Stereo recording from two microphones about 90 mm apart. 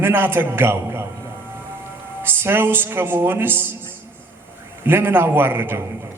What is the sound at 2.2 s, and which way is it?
A man's voice, 25° right (ahead or behind).